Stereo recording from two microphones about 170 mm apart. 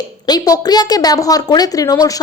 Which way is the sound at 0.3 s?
20° left (ahead or behind).